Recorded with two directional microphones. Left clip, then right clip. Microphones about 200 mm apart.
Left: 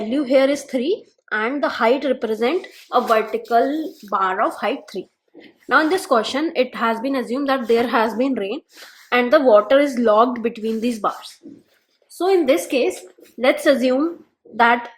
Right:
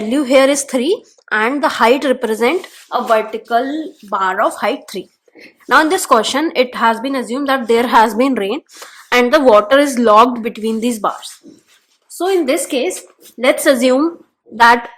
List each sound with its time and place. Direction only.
0.0 s a woman's voice: 40° right (ahead or behind); by 12.9 s 25° right (ahead or behind)
13.4 s a woman's voice: 35° right (ahead or behind)